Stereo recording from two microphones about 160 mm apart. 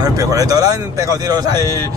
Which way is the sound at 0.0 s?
20° right (ahead or behind).